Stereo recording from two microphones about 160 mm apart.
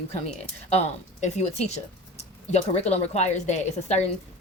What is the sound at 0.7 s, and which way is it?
A woman's voice, 45° left (ahead or behind).